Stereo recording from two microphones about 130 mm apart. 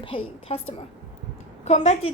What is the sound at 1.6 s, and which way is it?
Speech, 55° left (ahead or behind).